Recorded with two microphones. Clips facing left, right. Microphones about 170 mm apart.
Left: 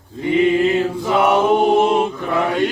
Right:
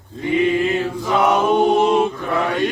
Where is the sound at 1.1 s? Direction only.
15° left (ahead or behind).